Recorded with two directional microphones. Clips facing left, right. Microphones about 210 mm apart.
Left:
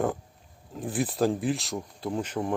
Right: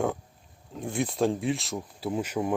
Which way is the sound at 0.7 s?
Centre (ahead or behind).